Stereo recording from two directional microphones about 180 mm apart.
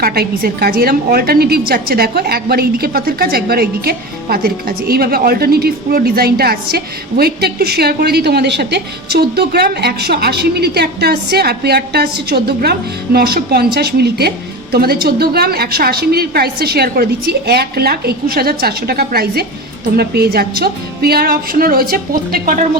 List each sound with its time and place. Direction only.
0.0 s a woman's voice: 60° right (ahead or behind)